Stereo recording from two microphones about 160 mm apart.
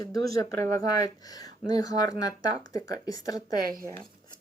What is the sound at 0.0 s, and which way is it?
Speech, 20° left (ahead or behind).